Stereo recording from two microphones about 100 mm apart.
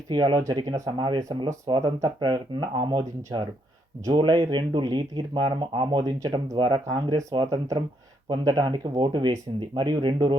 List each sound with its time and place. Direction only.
0.1 s speech: 45° right (ahead or behind)
1.2 s speech: 35° right (ahead or behind)